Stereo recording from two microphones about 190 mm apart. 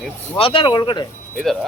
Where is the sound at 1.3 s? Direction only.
Centre (ahead or behind).